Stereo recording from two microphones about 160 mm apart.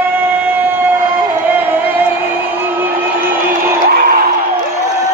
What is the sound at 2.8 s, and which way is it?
Music, 15° right (ahead or behind).